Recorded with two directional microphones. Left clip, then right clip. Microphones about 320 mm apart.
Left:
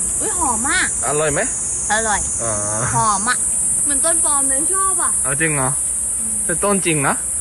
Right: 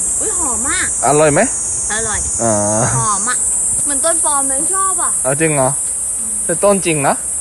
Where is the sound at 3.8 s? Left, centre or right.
Right.